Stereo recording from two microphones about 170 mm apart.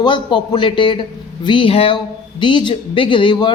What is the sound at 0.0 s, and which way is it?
Speech, 30° left (ahead or behind).